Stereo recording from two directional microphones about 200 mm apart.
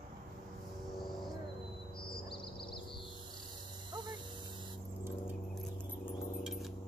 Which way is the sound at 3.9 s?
20° right (ahead or behind).